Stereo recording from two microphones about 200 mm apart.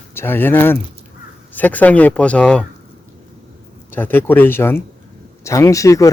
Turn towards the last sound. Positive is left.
turn(degrees=15)  # may be behind; listen again after turning